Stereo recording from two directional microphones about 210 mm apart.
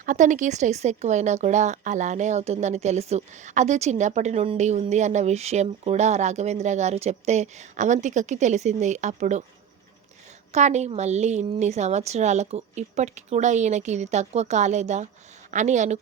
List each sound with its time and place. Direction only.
0.0 s a woman's voice: 35° right (ahead or behind)
10.5 s a woman's voice: 35° right (ahead or behind)